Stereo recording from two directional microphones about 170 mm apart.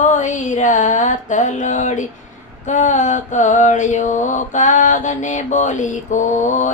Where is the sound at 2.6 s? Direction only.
45° left (ahead or behind).